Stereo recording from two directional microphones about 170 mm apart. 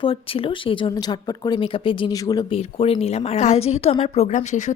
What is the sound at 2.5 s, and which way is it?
Speech, 35° left (ahead or behind).